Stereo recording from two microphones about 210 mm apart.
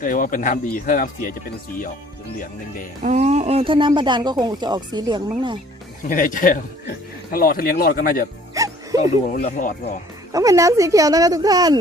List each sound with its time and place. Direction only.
0.0 s speech: 40° left (ahead or behind)
2.4 s speech: 40° left (ahead or behind)
3.0 s speech: 35° right (ahead or behind)
6.1 s speech: 40° left (ahead or behind)
8.5 s music: 15° right (ahead or behind)
9.4 s speech: 40° left (ahead or behind)
10.3 s speech: 15° right (ahead or behind)